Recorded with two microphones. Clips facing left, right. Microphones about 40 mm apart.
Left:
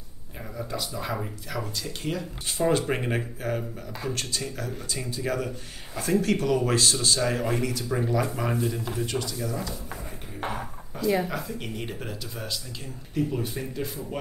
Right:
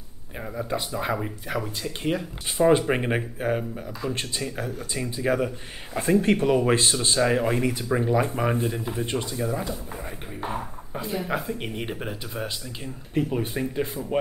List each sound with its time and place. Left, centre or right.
0.6 s speech: right
11.2 s speech: right